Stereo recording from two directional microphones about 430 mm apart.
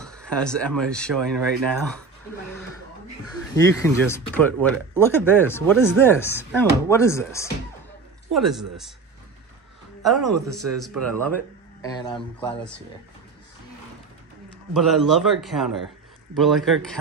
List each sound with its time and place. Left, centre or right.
0.0 s speech: centre
3.3 s speech: centre
10.0 s speech: centre
10.4 s a man's voice: right
10.8 s speech: centre
14.7 s speech: centre